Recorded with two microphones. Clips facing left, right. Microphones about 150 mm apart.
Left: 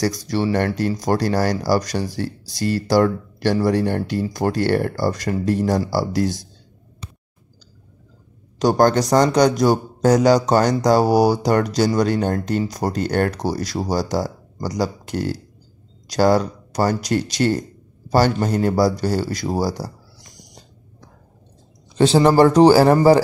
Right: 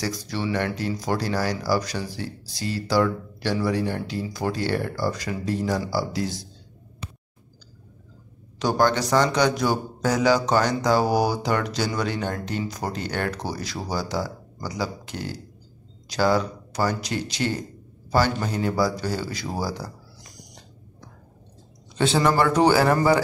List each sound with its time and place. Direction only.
0.0 s speech: 40° left (ahead or behind)
1.6 s a man's voice: 40° left (ahead or behind)
2.0 s speech: 60° left (ahead or behind)
2.9 s speech: 45° left (ahead or behind)
3.7 s speech: 60° left (ahead or behind)
4.8 s speech: 40° left (ahead or behind)
5.9 s speech: 70° left (ahead or behind)
8.5 s a man's voice: 40° left (ahead or behind)
21.9 s a man's voice: 35° left (ahead or behind)